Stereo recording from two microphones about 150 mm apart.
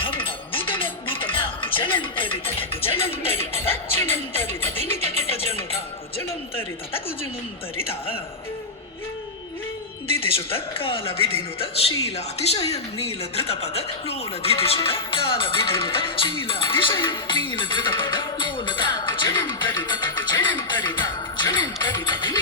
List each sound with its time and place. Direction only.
0.0 s music: 35° left (ahead or behind)
3.3 s speech: 15° left (ahead or behind)
7.9 s speech: 40° left (ahead or behind)
10.3 s speech: 40° left (ahead or behind)
17.0 s music: 35° left (ahead or behind)